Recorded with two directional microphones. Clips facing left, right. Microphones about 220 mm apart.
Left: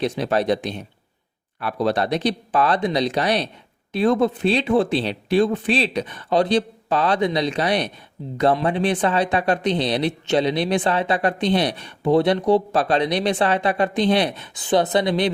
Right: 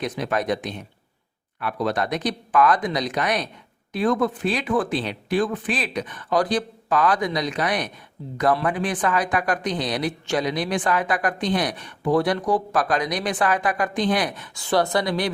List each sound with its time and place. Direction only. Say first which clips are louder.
0.0 s speech: left 4 dB; 30° left (ahead or behind)